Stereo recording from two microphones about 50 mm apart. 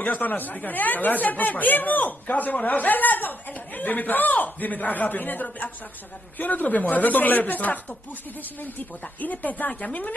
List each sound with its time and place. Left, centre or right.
0.0 s speech: left
9.2 s speech: left